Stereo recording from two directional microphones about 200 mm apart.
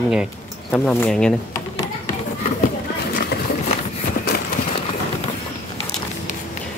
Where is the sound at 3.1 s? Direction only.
50° left (ahead or behind).